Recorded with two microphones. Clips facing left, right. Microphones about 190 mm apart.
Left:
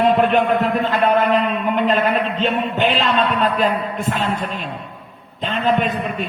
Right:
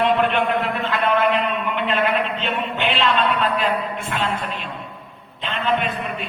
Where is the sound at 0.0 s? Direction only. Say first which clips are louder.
Left 4 dB; 40° left (ahead or behind).